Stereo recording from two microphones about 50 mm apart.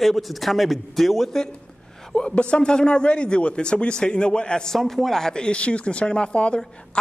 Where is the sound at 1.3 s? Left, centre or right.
Centre.